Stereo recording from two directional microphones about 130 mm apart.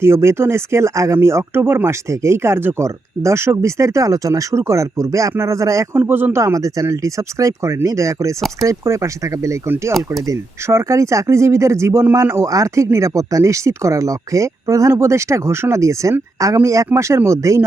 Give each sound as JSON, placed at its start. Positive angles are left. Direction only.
{"t": 0.0, "sound": "speech", "side_deg": -20}